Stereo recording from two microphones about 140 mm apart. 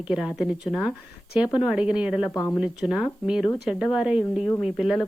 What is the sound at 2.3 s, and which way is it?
Speech, 20° left (ahead or behind).